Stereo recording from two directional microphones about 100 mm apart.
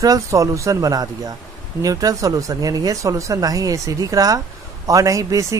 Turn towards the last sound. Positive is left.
turn(degrees=-35)  # may be behind; listen again after turning